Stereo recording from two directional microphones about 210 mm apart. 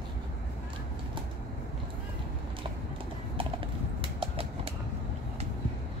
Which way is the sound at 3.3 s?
25° right (ahead or behind).